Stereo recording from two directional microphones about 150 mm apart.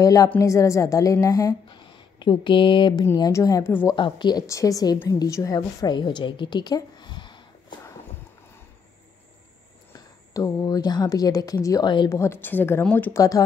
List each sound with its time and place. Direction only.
0.0 s a woman's voice: 25° left (ahead or behind)
3.1 s a woman's voice: 20° left (ahead or behind)
3.9 s a woman's voice: 30° left (ahead or behind)
9.9 s speech: 25° left (ahead or behind)
12.1 s a woman's voice: 20° left (ahead or behind)